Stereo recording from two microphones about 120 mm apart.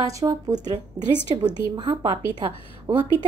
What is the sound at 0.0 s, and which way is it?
Speech, 30° right (ahead or behind).